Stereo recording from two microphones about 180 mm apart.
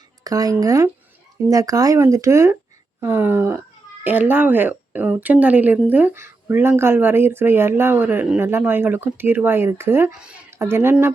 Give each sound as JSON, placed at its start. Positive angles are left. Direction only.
{"t": 0.3, "sound": "speech", "side_deg": -20}